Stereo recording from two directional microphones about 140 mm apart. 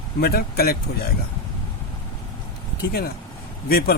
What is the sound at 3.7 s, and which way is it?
Speech, 90° left.